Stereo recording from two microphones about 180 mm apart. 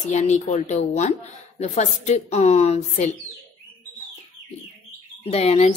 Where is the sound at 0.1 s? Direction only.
40° left (ahead or behind).